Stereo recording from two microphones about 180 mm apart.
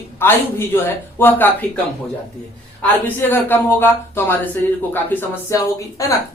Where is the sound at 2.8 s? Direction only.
10° left (ahead or behind).